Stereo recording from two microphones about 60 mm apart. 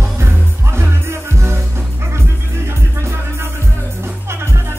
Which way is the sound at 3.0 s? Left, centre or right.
Right.